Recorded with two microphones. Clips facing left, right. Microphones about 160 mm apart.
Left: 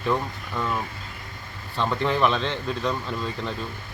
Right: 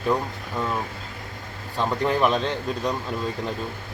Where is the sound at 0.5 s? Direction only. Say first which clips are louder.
Right 1 dB; 20° right (ahead or behind).